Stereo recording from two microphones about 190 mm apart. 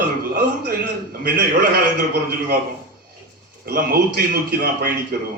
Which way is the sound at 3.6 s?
50° right (ahead or behind).